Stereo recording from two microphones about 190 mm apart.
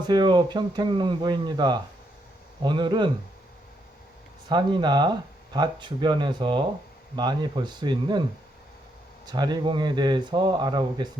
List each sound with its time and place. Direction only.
0.1 s speech: 25° right (ahead or behind)
4.4 s speech: 25° right (ahead or behind)
9.2 s speech: 20° right (ahead or behind)